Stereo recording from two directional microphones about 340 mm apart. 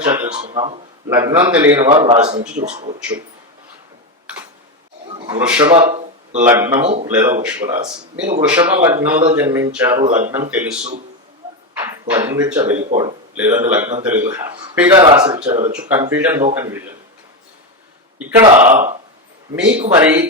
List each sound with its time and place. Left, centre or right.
0.1 s a sound: centre
0.4 s speech: centre
2.0 s a man's voice: centre
5.4 s a man's voice: centre
5.8 s a sound: centre
6.4 s speech: centre
6.8 s a man's voice: right
7.1 s a man's voice: centre
8.4 s speech: centre
12.9 s speech: centre
13.3 s speech: centre
15.8 s speech: centre
18.3 s speech: centre
19.5 s a man's voice: centre